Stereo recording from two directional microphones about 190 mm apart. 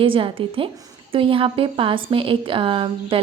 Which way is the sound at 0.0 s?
25° right (ahead or behind).